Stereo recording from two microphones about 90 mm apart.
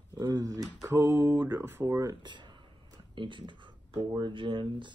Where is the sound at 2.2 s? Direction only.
60° right (ahead or behind).